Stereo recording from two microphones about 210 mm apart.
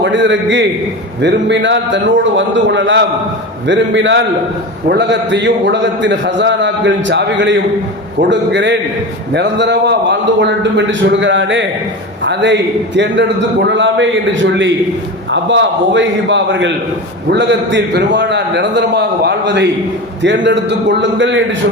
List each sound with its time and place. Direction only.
0.0 s a man's voice: 60° right (ahead or behind)